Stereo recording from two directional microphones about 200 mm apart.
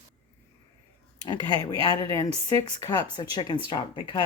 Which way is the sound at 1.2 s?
20° left (ahead or behind).